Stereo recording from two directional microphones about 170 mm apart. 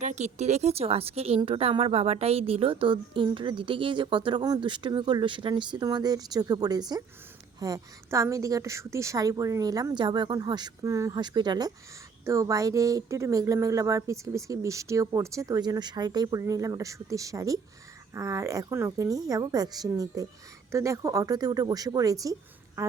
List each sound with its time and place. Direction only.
0.0 s a woman's voice: 45° right (ahead or behind); by 22.9 s 20° right (ahead or behind)